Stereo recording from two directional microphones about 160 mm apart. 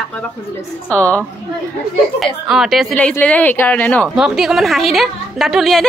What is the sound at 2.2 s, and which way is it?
A woman's voice, centre (ahead or behind).